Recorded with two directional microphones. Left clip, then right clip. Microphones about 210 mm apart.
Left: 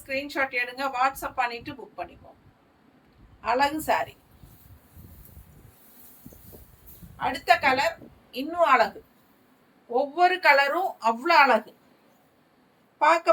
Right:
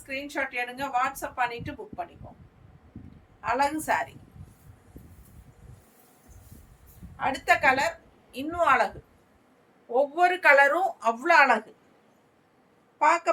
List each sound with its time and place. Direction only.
0.1 s a woman's voice: 15° right (ahead or behind)
3.4 s a woman's voice: 15° right (ahead or behind)
7.2 s a woman's voice: 15° right (ahead or behind)
9.9 s a woman's voice: 15° right (ahead or behind)
13.0 s a woman's voice: 15° right (ahead or behind)